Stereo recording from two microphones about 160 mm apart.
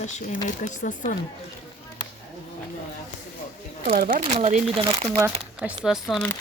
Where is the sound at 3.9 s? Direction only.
65° right (ahead or behind).